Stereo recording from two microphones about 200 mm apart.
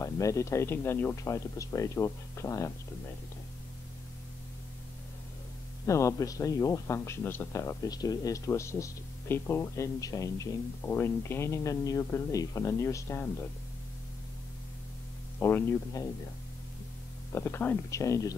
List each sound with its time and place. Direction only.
0.0 s speech: 15° left (ahead or behind)
5.9 s speech: 15° left (ahead or behind)
15.3 s speech: 10° left (ahead or behind)
17.3 s speech: 15° left (ahead or behind)